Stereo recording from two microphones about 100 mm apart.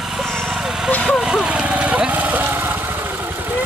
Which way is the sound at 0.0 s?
Centre (ahead or behind).